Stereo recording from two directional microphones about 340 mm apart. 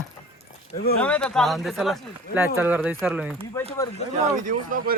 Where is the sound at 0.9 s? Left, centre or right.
Centre.